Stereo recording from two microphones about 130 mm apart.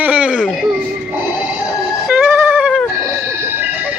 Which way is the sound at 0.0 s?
10° right (ahead or behind).